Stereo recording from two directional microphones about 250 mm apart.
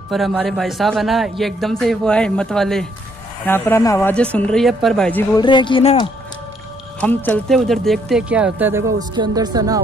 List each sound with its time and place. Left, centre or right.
0.1 s speech: centre
5.4 s speech: centre
7.0 s speech: centre